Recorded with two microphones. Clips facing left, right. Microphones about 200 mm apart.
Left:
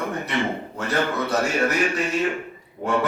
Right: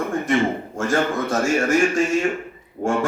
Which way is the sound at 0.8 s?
45° right (ahead or behind).